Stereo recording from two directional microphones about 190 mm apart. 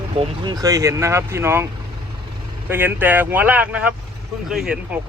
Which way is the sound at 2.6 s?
10° right (ahead or behind).